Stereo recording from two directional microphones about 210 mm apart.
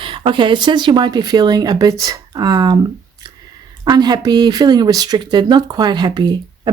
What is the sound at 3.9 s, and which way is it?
Speech, 20° right (ahead or behind).